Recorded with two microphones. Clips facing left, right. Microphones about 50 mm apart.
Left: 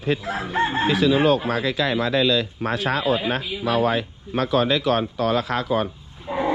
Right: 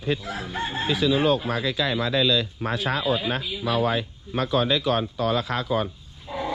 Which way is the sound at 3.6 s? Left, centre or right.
Left.